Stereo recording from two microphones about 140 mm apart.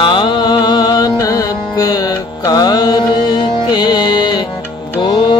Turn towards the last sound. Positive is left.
turn(degrees=30)  # may be behind; listen again after turning